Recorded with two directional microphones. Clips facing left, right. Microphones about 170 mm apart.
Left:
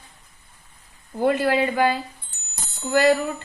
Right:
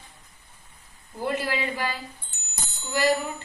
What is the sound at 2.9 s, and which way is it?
Speech, 60° left (ahead or behind).